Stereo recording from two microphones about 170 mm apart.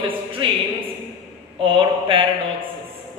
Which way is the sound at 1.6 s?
30° right (ahead or behind).